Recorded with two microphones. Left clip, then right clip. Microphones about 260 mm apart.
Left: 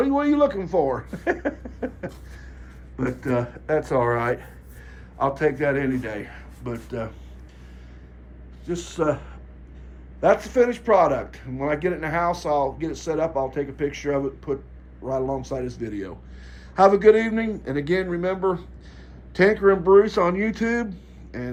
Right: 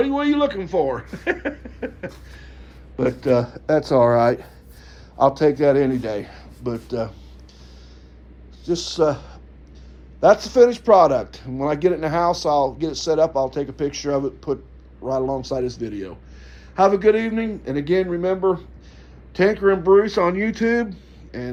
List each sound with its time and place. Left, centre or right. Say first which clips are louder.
0.0 s speech: right 1 dB; centre
8.6 s speech: right 6 dB; centre
10.2 s speech: right 5 dB; centre